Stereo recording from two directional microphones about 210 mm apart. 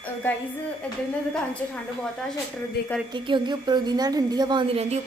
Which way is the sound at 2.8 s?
50° left (ahead or behind).